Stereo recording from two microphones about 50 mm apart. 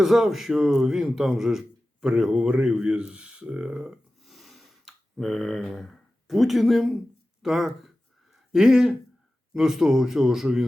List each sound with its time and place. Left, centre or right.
0.0 s speech: centre
7.4 s a sound: centre
9.5 s speech: centre